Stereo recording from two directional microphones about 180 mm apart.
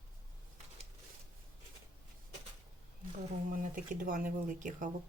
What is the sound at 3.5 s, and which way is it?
Speech, 50° right (ahead or behind).